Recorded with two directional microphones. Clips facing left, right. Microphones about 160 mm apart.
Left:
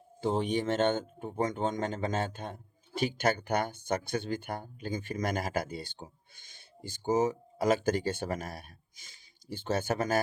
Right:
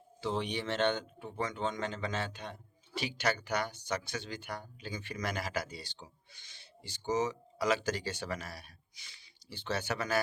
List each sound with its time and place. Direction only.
0.2 s speech: 45° left (ahead or behind)